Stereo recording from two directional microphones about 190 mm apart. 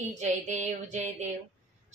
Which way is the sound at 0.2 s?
40° right (ahead or behind).